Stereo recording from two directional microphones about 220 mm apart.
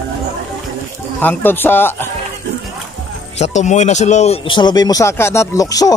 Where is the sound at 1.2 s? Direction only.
10° left (ahead or behind).